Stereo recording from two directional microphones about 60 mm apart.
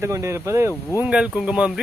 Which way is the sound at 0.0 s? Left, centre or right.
Right.